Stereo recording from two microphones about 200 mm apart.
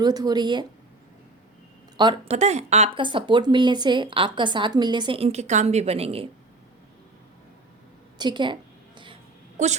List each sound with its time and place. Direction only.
0.0 s speech: 20° right (ahead or behind)
2.0 s speech: 25° right (ahead or behind)
8.2 s speech: 25° right (ahead or behind)
9.6 s a woman's voice: 35° right (ahead or behind)